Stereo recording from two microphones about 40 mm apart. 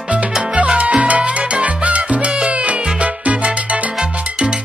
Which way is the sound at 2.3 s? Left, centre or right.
Right.